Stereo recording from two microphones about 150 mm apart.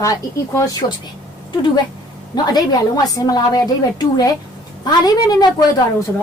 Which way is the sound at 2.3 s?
25° left (ahead or behind).